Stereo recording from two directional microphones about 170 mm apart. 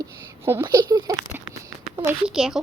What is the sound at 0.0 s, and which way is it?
Speech, 20° right (ahead or behind).